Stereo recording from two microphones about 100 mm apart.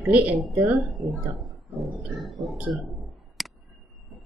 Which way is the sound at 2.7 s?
Centre (ahead or behind).